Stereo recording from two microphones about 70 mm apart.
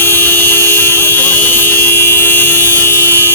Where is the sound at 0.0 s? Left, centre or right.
Left.